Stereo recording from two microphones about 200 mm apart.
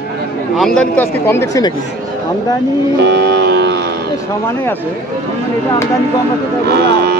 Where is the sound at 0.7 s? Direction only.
10° left (ahead or behind).